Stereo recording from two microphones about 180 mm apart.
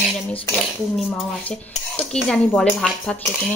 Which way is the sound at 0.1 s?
Centre (ahead or behind).